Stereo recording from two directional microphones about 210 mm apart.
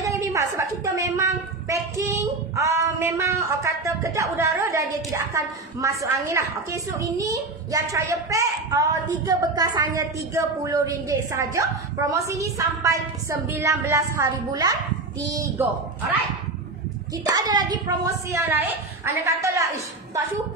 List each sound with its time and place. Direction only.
0.0 s a sound: 15° right (ahead or behind)
5.3 s a woman's voice: 15° right (ahead or behind)
17.2 s a woman's voice: 20° right (ahead or behind)